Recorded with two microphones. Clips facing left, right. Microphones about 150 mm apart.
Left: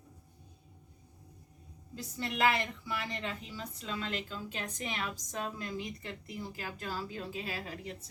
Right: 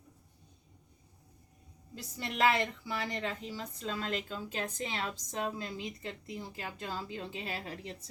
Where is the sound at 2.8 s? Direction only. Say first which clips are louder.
Right 2 dB; 35° right (ahead or behind).